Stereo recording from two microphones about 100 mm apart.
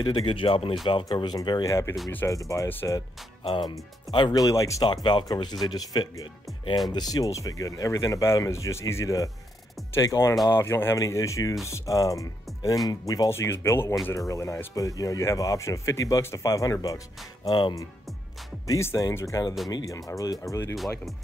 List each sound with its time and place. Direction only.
0.0 s speech: 50° left (ahead or behind)
1.1 s speech: 45° left (ahead or behind)
1.7 s speech: 25° left (ahead or behind)
3.4 s speech: 45° left (ahead or behind)
4.8 s speech: 45° left (ahead or behind)
13.3 s speech: 25° left (ahead or behind); by 17.8 s 40° left (ahead or behind)
18.7 s speech: 30° left (ahead or behind)
20.7 s speech: centre (ahead or behind)